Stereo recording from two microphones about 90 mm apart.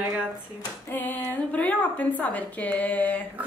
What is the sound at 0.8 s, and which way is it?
A woman's voice, 20° left (ahead or behind).